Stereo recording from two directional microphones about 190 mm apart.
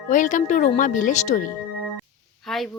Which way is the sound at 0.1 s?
40° left (ahead or behind).